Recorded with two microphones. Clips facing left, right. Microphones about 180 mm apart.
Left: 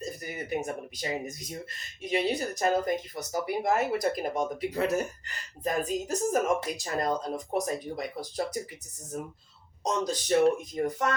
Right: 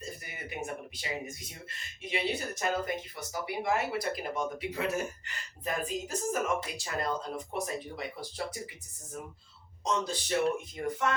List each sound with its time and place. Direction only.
0.0 s speech: 40° left (ahead or behind)
9.8 s speech: 40° left (ahead or behind)